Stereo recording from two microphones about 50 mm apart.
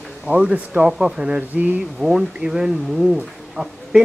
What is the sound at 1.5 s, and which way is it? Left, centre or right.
Speech, right.